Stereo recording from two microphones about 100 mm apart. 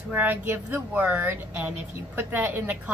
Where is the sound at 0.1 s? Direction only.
15° right (ahead or behind).